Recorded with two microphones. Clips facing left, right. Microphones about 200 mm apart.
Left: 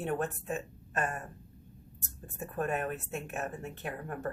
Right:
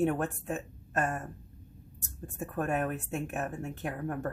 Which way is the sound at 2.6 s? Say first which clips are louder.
Right 2 dB; 45° right (ahead or behind).